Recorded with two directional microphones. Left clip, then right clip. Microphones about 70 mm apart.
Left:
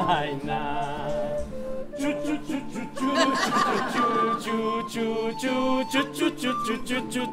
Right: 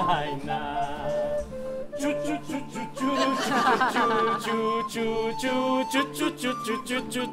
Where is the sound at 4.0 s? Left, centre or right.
Right.